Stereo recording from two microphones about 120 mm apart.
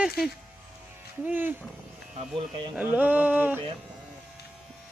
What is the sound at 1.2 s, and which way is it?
Speech, 15° right (ahead or behind).